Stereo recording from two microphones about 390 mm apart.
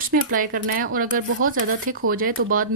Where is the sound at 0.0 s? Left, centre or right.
Right.